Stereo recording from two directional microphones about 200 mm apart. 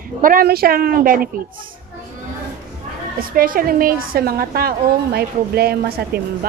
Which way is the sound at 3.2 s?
45° right (ahead or behind).